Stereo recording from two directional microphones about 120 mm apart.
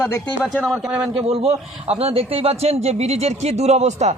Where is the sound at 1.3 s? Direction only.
60° right (ahead or behind).